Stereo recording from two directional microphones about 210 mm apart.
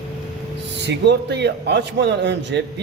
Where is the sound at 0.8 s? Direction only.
55° right (ahead or behind).